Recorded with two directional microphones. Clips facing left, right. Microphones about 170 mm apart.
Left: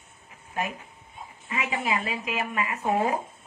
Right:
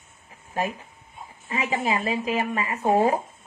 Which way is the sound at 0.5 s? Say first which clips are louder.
Right 4 dB; 30° right (ahead or behind).